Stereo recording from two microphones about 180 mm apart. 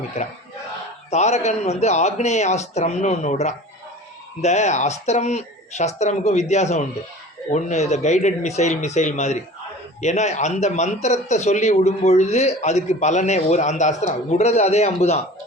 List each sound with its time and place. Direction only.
1.1 s a man's voice: 40° left (ahead or behind)